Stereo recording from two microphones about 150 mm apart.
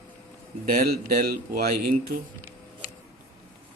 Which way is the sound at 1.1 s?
85° right.